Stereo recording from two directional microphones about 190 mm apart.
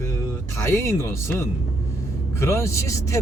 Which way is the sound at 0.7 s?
15° left (ahead or behind).